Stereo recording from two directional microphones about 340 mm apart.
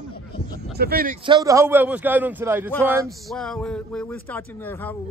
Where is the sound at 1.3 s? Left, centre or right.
Centre.